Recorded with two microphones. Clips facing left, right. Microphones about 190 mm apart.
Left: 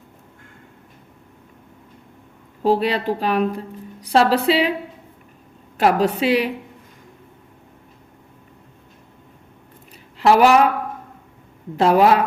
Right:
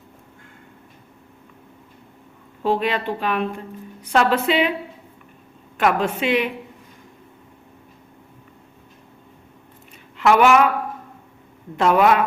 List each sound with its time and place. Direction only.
2.6 s a woman's voice: 35° left (ahead or behind)
5.7 s a woman's voice: 35° left (ahead or behind)
10.2 s a woman's voice: 35° left (ahead or behind)
11.8 s a woman's voice: 35° left (ahead or behind)